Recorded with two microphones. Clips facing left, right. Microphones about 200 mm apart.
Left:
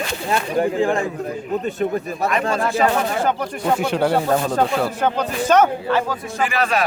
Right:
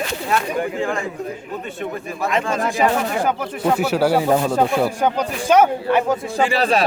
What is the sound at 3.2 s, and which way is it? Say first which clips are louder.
Speech: right 1 dB; 5° right (ahead or behind).